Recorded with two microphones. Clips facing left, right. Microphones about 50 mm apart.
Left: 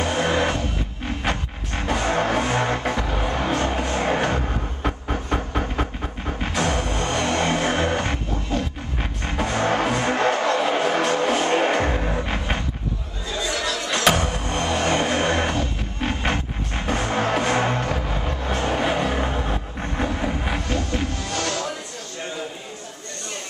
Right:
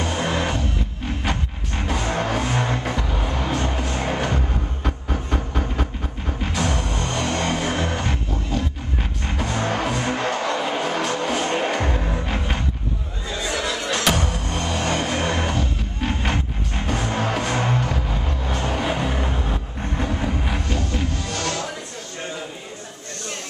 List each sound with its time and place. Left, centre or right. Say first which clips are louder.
0.1 s music: left 2 dB; centre
13.9 s music: left 4 dB; centre